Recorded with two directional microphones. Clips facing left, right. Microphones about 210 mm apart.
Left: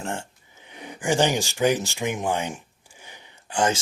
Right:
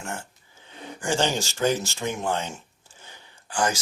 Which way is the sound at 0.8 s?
15° left (ahead or behind).